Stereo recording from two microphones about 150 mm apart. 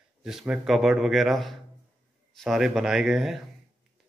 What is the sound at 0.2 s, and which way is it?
Speech, 5° right (ahead or behind).